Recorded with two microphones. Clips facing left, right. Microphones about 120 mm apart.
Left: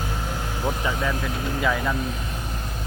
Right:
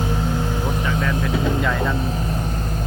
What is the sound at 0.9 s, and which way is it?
Speech, 10° left (ahead or behind).